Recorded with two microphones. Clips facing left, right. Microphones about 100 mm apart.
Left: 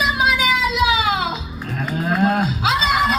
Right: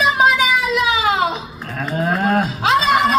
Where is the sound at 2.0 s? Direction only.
45° right (ahead or behind).